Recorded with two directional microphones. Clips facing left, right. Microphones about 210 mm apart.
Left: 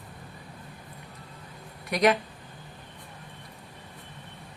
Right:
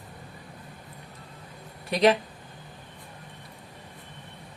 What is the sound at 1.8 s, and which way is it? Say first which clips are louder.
Speech: right 2 dB; 30° right (ahead or behind).